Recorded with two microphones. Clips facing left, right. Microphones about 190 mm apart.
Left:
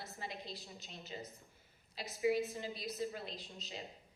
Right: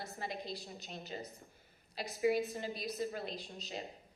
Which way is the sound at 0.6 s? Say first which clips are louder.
Right 5 dB; 55° right (ahead or behind).